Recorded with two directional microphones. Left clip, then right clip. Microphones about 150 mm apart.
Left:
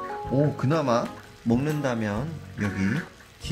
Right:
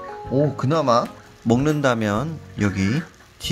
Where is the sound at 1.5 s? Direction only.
55° right (ahead or behind).